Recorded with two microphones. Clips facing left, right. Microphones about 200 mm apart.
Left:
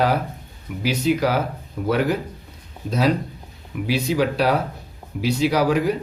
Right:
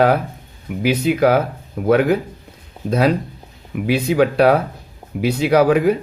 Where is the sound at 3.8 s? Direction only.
55° right (ahead or behind).